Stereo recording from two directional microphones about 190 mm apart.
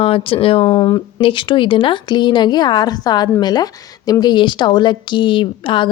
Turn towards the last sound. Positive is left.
turn(degrees=25)  # may be behind; listen again after turning